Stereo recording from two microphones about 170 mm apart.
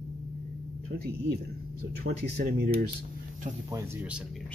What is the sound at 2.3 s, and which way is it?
Speech, 60° right (ahead or behind).